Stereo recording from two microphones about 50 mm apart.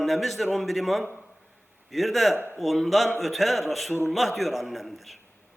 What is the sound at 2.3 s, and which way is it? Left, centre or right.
Speech, right.